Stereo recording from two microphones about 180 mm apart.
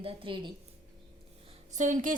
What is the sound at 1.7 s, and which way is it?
Speech, 45° right (ahead or behind).